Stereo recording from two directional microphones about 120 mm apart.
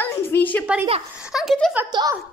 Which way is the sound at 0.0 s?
15° left (ahead or behind).